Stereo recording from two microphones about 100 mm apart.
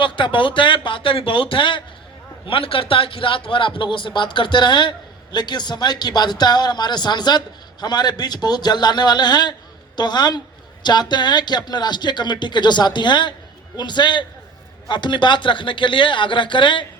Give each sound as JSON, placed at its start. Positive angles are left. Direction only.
{"t": 0.0, "sound": "a man's voice", "side_deg": 55}